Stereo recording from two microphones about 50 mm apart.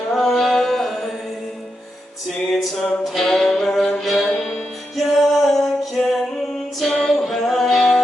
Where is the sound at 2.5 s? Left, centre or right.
Centre.